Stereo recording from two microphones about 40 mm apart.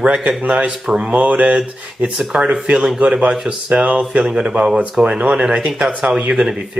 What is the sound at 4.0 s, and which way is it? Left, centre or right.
Speech, right.